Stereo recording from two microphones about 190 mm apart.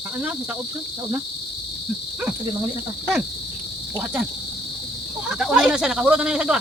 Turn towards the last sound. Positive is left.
turn(degrees=-5)  # may be behind; listen again after turning